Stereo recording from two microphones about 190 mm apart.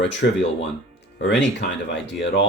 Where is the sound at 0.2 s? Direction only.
65° left (ahead or behind).